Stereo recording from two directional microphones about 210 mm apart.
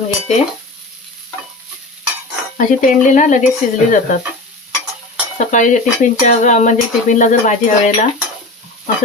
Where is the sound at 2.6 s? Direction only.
40° left (ahead or behind).